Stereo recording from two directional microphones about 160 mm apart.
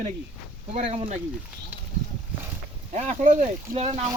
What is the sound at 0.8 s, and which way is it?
Speech, 40° right (ahead or behind).